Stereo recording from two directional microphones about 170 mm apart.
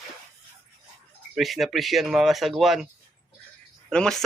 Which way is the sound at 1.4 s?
Centre (ahead or behind).